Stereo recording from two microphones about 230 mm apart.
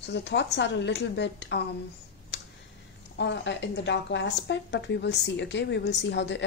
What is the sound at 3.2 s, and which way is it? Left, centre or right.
A woman's voice, left.